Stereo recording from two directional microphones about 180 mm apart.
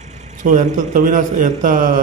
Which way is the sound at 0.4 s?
45° right (ahead or behind).